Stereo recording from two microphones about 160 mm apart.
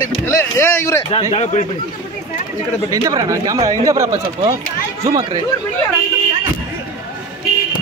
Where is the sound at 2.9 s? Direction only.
20° right (ahead or behind).